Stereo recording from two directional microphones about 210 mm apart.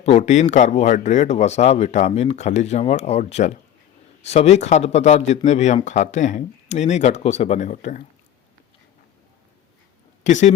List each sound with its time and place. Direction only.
0.0 s a man's voice: 30° left (ahead or behind)
10.2 s a man's voice: 35° left (ahead or behind)